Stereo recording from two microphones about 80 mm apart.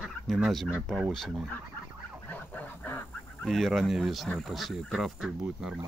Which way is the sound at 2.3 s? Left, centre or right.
Left.